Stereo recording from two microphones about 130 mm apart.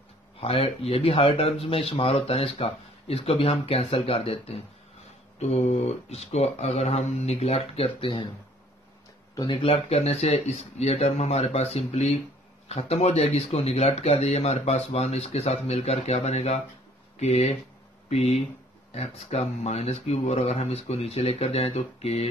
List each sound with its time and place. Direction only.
0.4 s speech: 50° left (ahead or behind)
9.3 s speech: 35° left (ahead or behind); by 22.3 s 50° left (ahead or behind)